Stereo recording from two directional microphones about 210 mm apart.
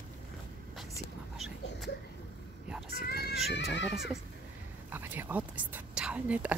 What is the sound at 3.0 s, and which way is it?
Horse, 45° left (ahead or behind).